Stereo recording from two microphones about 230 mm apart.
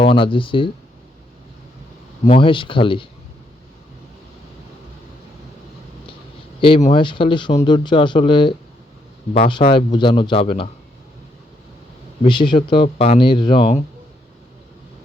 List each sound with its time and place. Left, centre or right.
0.0 s speech: left
2.2 s speech: left
6.6 s speech: left
12.2 s speech: left